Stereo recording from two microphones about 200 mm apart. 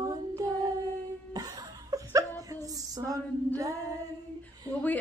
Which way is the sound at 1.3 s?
20° right (ahead or behind).